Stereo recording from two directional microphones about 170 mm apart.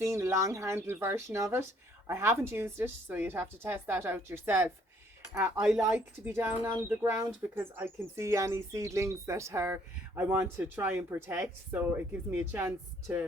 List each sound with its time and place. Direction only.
0.0 s speech: 15° right (ahead or behind)
6.2 s speech: 10° right (ahead or behind)